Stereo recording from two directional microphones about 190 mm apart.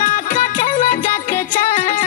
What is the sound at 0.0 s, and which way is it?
Music, 45° left (ahead or behind).